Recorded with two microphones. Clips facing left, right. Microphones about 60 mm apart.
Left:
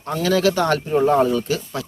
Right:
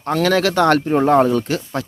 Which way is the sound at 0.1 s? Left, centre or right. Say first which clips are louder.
Right 2 dB; right.